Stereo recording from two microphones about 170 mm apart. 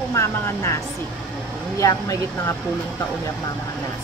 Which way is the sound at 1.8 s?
20° left (ahead or behind).